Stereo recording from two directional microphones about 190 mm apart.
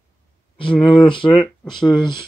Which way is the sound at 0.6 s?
25° left (ahead or behind).